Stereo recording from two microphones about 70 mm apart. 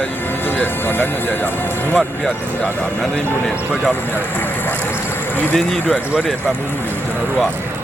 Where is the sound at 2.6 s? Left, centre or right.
Left.